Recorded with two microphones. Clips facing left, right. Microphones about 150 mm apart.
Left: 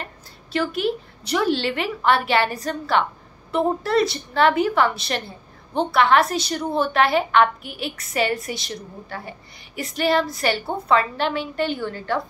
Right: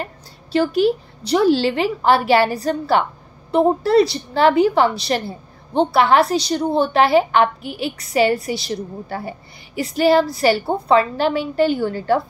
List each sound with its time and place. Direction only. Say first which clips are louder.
0.0 s a sound: right 6 dB; 30° right (ahead or behind)
1.2 s a woman's voice: right 6 dB; 30° right (ahead or behind)
6.2 s a woman's voice: right 5 dB; centre (ahead or behind)
6.5 s a woman's voice: right 4 dB; 30° right (ahead or behind)